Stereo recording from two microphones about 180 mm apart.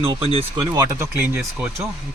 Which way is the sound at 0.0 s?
30° right (ahead or behind).